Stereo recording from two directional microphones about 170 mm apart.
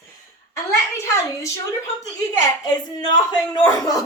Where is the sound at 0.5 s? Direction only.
20° left (ahead or behind).